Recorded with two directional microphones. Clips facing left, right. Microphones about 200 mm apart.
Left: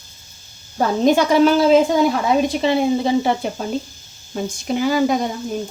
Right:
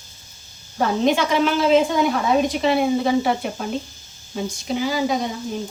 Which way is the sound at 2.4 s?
25° left (ahead or behind).